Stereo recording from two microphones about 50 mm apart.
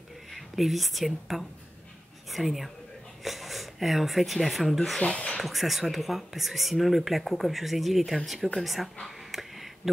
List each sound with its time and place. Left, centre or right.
0.3 s speech: centre
5.0 s speech: left
5.4 s speech: centre
9.0 s a sound: centre